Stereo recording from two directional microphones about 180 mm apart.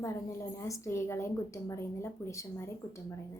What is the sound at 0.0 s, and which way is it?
A woman's voice, 15° left (ahead or behind).